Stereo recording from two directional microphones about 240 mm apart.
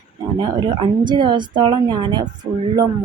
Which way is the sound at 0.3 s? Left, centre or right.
Centre.